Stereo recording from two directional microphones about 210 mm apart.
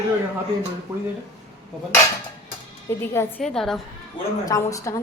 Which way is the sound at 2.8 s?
10° left (ahead or behind).